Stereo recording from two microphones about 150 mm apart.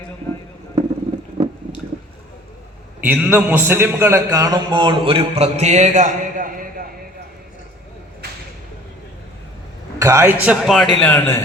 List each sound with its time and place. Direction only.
1.4 s liquid: 40° right (ahead or behind)
3.0 s a man's voice: 10° right (ahead or behind); by 6.8 s 70° right (ahead or behind)
10.0 s speech: 20° right (ahead or behind); by 10.8 s centre (ahead or behind)
11.0 s a man's voice: 15° left (ahead or behind)